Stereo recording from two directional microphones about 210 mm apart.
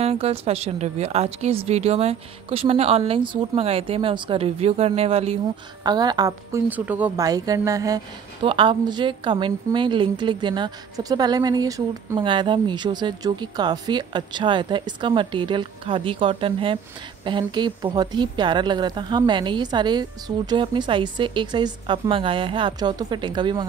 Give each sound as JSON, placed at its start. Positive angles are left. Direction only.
{"t": 0.0, "sound": "a woman's voice", "side_deg": -30}